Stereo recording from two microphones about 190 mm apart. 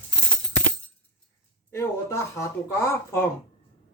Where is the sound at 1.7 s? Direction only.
15° left (ahead or behind).